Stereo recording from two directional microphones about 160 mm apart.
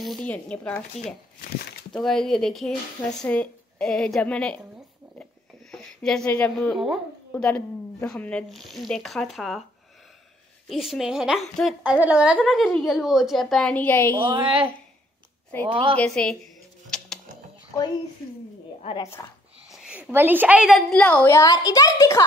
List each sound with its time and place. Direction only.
0.0 s a woman's voice: 5° left (ahead or behind)
1.9 s a woman's voice: 5° left (ahead or behind)
5.7 s a woman's voice: 5° left (ahead or behind)
10.7 s a woman's voice: centre (ahead or behind)
11.8 s a woman's voice: 10° right (ahead or behind); by 14.1 s 10° left (ahead or behind)
14.2 s a woman's voice: 30° right (ahead or behind)
19.7 s a woman's voice: 5° right (ahead or behind)
21.3 s a woman's voice: 20° left (ahead or behind)